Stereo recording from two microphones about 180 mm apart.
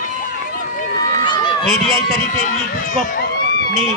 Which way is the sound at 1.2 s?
25° left (ahead or behind).